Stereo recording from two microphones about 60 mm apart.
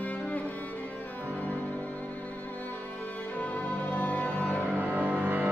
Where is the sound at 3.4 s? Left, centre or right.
Left.